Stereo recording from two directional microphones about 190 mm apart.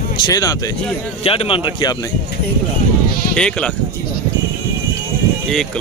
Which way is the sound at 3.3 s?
5° left (ahead or behind).